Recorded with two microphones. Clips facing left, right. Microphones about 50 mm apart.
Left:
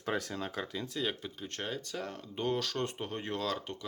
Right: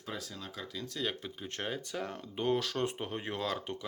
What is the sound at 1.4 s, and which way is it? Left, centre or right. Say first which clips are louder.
Speech: right 1 dB; centre.